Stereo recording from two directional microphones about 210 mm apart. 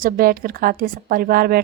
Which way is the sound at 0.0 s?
45° right (ahead or behind).